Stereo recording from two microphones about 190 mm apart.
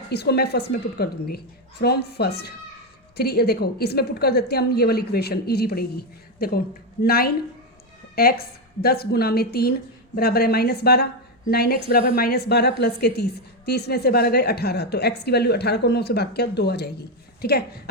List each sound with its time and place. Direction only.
0.1 s a woman's voice: 60° left (ahead or behind)